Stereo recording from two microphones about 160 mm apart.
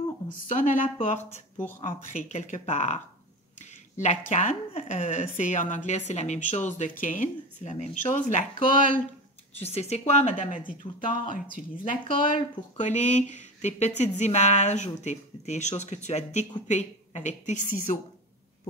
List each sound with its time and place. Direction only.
0.5 s a woman's voice: 55° left (ahead or behind)
8.6 s speech: 60° right (ahead or behind)
9.6 s speech: 40° left (ahead or behind)
11.7 s speech: 60° left (ahead or behind)